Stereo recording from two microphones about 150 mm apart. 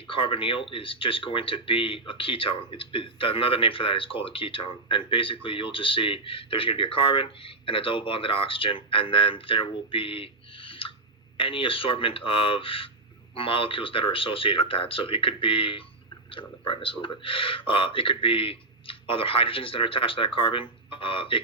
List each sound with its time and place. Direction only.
0.1 s speech: 35° left (ahead or behind)